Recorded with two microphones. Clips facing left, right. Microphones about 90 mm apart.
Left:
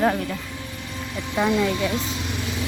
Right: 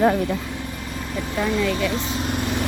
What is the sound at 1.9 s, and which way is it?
Vehicle, 40° right (ahead or behind).